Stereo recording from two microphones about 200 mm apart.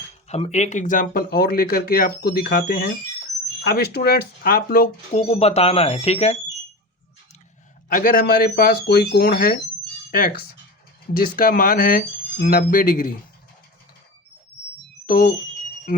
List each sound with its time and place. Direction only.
0.3 s speech: 30° left (ahead or behind)
5.1 s speech: 30° left (ahead or behind)
7.9 s speech: 45° left (ahead or behind)
11.1 s speech: 45° left (ahead or behind)
15.0 s speech: 45° left (ahead or behind)